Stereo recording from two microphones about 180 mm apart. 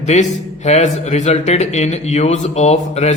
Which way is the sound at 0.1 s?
40° left (ahead or behind).